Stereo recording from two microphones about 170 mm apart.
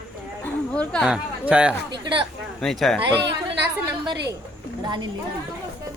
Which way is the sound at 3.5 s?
80° right.